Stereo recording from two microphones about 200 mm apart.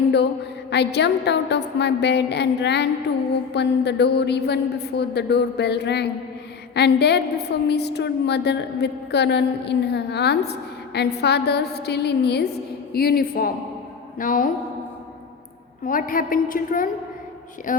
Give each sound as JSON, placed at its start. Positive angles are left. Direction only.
{"t": 0.7, "sound": "a woman's voice", "side_deg": 55}
{"t": 15.9, "sound": "a woman's voice", "side_deg": 45}